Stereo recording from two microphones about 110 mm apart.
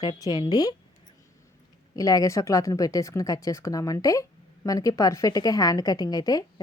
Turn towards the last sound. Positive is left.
turn(degrees=35)  # may be behind; listen again after turning